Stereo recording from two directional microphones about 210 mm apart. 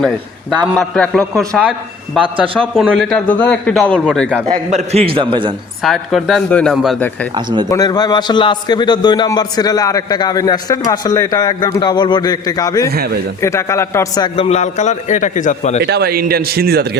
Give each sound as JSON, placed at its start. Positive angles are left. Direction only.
{"t": 0.6, "sound": "a man's voice", "side_deg": 5}
{"t": 2.2, "sound": "a man's voice", "side_deg": -25}
{"t": 2.6, "sound": "a man's voice", "side_deg": 0}
{"t": 4.4, "sound": "a man's voice", "side_deg": -35}
{"t": 5.8, "sound": "a man's voice", "side_deg": 0}
{"t": 7.3, "sound": "a man's voice", "side_deg": -20}
{"t": 7.7, "sound": "a man's voice", "side_deg": 20}
{"t": 12.9, "sound": "speech", "side_deg": -50}
{"t": 13.4, "sound": "a man's voice", "side_deg": 15}
{"t": 14.3, "sound": "a man's voice", "side_deg": 30}
{"t": 15.8, "sound": "speech", "side_deg": -50}